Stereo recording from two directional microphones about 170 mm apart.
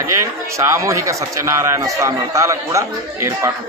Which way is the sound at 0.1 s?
15° right (ahead or behind).